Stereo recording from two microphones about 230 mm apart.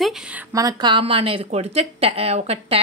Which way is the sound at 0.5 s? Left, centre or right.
Centre.